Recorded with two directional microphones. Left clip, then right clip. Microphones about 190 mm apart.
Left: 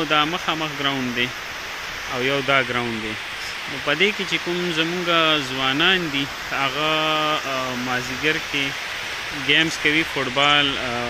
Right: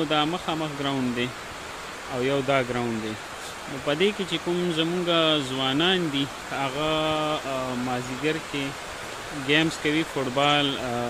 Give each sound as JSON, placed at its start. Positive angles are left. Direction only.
{"t": 0.1, "sound": "speech", "side_deg": -10}
{"t": 3.8, "sound": "speech", "side_deg": -15}